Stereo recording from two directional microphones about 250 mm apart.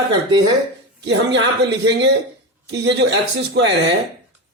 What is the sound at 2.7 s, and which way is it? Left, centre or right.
A man's voice, right.